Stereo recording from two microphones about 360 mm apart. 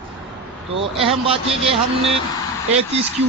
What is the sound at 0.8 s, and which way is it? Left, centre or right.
Speech, centre.